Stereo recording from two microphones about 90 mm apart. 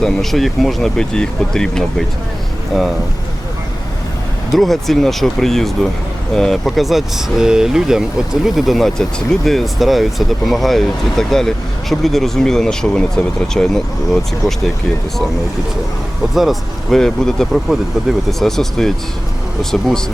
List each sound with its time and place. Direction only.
0.0 s speech: 5° left (ahead or behind)
4.5 s speech: centre (ahead or behind)
16.3 s speech: centre (ahead or behind)